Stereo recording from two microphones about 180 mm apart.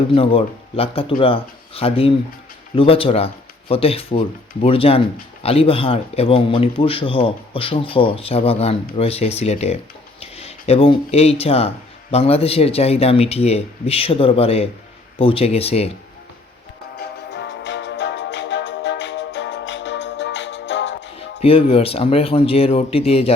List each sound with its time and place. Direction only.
0.1 s a man's voice: 30° left (ahead or behind)
17.0 s music: 70° left (ahead or behind)
21.4 s a man's voice: 30° left (ahead or behind)